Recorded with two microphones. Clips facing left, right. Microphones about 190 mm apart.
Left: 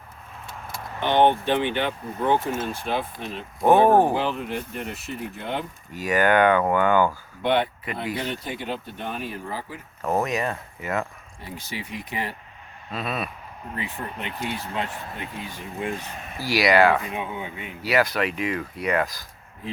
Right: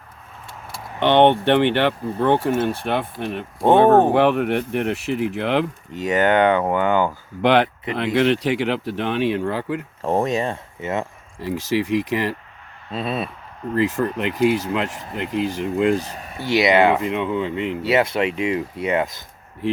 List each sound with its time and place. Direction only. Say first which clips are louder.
0.9 s speech: right 5 dB; 70° right (ahead or behind)
5.9 s speech: right 2 dB; 25° right (ahead or behind)
7.4 s speech: right 6 dB; 80° right
10.0 s speech: right 3 dB; 30° right (ahead or behind)
11.3 s speech: right 14 dB; 90° right
12.9 s speech: right 4 dB; 30° right (ahead or behind)
13.7 s speech: right 13 dB; 90° right
16.0 s speech: right 3 dB; 40° right (ahead or behind)
16.4 s speech: right 3 dB; 25° right (ahead or behind)
17.1 s speech: right 9 dB; 80° right
17.8 s speech: right 2 dB; 25° right (ahead or behind)